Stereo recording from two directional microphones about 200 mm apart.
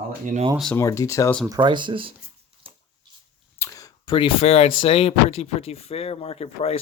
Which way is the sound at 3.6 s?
15° left (ahead or behind).